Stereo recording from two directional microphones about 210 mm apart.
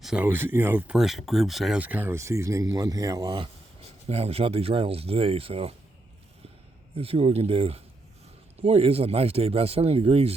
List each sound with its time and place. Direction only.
0.0 s speech: 5° right (ahead or behind); by 5.7 s 25° right (ahead or behind)
6.9 s speech: 25° right (ahead or behind)